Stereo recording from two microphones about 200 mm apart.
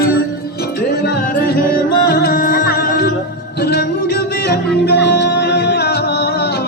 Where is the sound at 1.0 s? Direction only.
45° left (ahead or behind).